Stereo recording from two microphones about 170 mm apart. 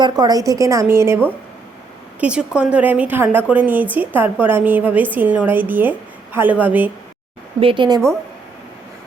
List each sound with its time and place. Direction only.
0.0 s a woman's voice: 25° right (ahead or behind)
2.2 s a woman's voice: 5° right (ahead or behind)
7.6 s a woman's voice: 30° right (ahead or behind)